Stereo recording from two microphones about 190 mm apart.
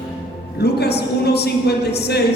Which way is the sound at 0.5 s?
60° left (ahead or behind).